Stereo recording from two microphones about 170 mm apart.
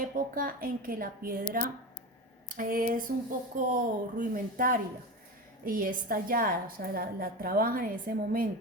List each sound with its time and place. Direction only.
0.0 s a woman's voice: 55° right (ahead or behind)